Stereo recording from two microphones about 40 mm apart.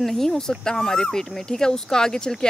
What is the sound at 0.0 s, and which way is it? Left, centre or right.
Speech, centre.